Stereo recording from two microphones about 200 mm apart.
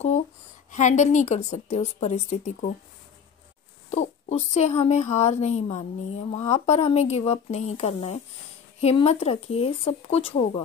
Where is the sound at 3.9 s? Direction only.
35° left (ahead or behind).